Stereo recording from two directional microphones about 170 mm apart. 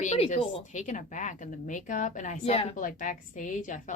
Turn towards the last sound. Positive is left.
turn(degrees=50)  # may be behind; listen again after turning